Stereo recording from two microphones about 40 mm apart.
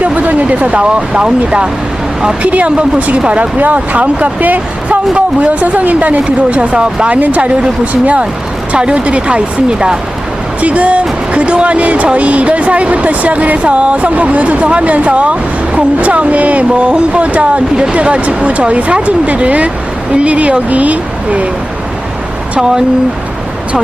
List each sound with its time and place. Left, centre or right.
0.0 s a woman's voice: right
2.4 s a woman's voice: right
5.1 s a woman's voice: right
7.2 s a woman's voice: right
10.6 s a woman's voice: right